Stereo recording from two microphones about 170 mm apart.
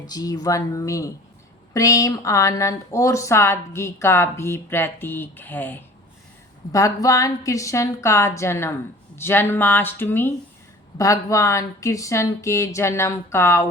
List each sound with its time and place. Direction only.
0.1 s a woman's voice: 20° left (ahead or behind)